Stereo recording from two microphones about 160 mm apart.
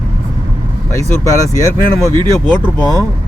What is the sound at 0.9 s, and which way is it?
Speech, 20° left (ahead or behind).